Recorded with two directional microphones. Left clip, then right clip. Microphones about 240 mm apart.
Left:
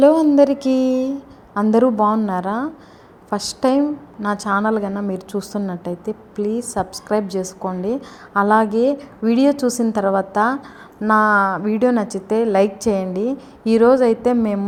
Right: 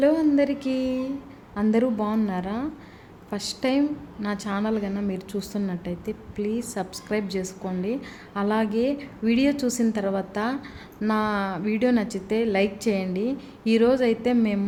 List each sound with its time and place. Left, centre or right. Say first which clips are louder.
0.0 s a woman's voice: left 8 dB; left